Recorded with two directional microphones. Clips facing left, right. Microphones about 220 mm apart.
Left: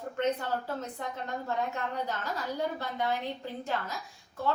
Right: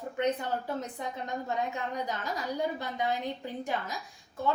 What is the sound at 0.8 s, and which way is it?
A woman's voice, 15° right (ahead or behind).